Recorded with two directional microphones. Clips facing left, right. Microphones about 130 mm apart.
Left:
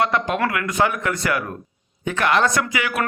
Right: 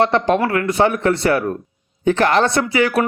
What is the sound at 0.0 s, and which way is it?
A man's voice, 35° right (ahead or behind).